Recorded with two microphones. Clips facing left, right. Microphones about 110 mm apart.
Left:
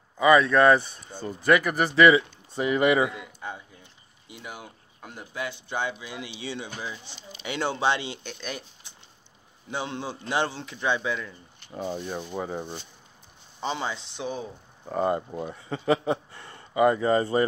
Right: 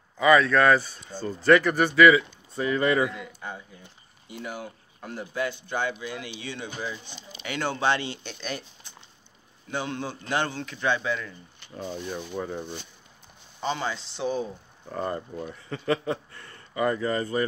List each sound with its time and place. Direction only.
0.2 s a man's voice: 20° left (ahead or behind)
2.0 s speech: 25° left (ahead or behind)
4.3 s speech: 15° left (ahead or behind)
5.5 s a man's voice: 20° left (ahead or behind)
6.6 s speech: 5° left (ahead or behind)
7.4 s a man's voice: 20° left (ahead or behind)
8.2 s speech: 5° left (ahead or behind)
9.7 s a man's voice: 25° left (ahead or behind)